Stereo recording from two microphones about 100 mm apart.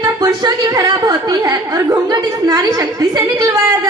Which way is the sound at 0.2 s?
40° right (ahead or behind).